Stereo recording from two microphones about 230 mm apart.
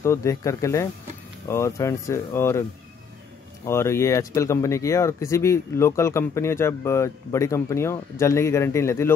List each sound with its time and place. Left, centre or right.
0.0 s speech: centre
3.6 s speech: centre